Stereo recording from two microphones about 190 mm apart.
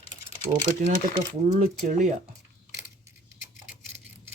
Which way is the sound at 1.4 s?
35° right (ahead or behind).